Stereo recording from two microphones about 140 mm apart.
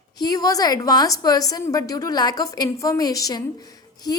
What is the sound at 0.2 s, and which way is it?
A woman's voice, 30° left (ahead or behind).